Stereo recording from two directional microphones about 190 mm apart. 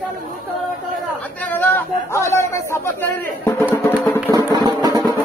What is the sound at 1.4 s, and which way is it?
Speech, 10° left (ahead or behind).